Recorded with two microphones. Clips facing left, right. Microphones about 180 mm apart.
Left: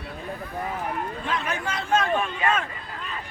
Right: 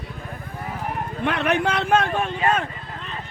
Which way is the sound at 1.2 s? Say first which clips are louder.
Right 12 dB; 65° right (ahead or behind).